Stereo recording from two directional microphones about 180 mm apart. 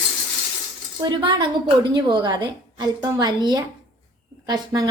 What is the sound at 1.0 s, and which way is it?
A woman's voice, 25° right (ahead or behind).